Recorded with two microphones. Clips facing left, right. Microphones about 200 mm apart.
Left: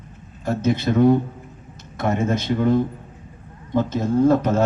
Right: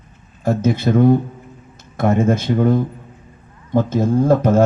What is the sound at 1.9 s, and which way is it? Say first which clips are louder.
Speech: right 5 dB; 50° right (ahead or behind).